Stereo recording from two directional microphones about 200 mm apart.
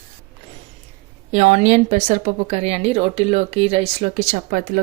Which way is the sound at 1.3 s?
35° right (ahead or behind).